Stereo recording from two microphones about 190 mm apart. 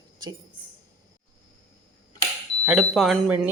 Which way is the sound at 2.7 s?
Centre (ahead or behind).